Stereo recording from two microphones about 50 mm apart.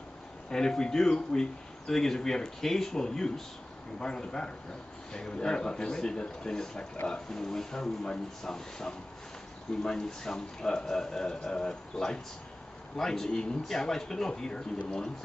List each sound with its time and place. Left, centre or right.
0.5 s speech: centre